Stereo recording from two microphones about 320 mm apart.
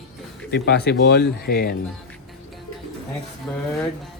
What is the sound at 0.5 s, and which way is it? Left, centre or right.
Speech, left.